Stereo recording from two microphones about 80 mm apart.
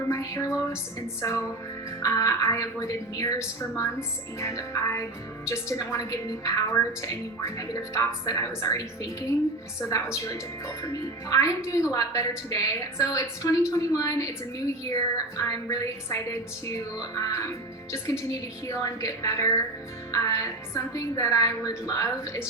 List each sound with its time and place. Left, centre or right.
0.1 s a sound: left
1.2 s a woman's voice: left
10.8 s a woman's voice: left